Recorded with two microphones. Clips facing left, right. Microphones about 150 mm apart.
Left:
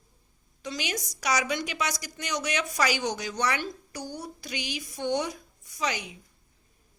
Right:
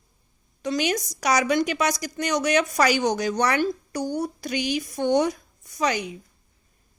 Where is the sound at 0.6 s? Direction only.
50° right (ahead or behind).